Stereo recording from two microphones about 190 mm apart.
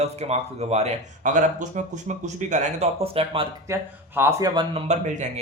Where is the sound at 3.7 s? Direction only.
15° right (ahead or behind); by 5.3 s 40° right (ahead or behind).